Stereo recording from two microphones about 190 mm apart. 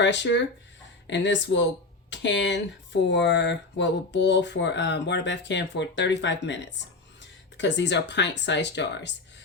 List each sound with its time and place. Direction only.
0.0 s speech: 70° left (ahead or behind)